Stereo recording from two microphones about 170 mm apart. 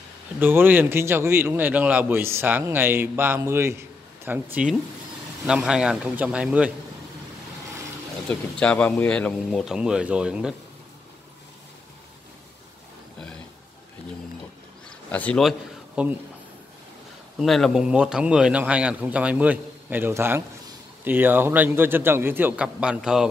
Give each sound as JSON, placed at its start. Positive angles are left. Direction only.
{"t": 0.4, "sound": "a man's voice", "side_deg": -10}
{"t": 8.3, "sound": "a man's voice", "side_deg": 5}
{"t": 14.9, "sound": "a sound", "side_deg": 10}
{"t": 17.4, "sound": "a man's voice", "side_deg": 0}